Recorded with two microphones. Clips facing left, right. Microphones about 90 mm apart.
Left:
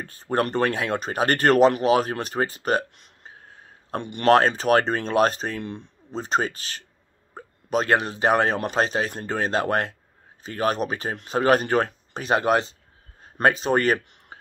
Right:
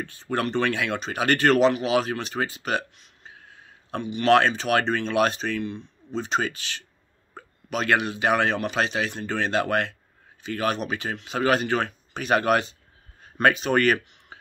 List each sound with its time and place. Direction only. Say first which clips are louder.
0.0 s speech: left 3 dB; 40° left (ahead or behind)
4.0 s speech: right 7 dB; 55° left (ahead or behind)
4.3 s speech: left 2 dB; 40° left (ahead or behind)
14.3 s whispering: left 2 dB; 40° left (ahead or behind)